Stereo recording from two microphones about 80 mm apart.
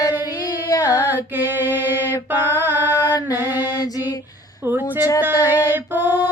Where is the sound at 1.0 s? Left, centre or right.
Right.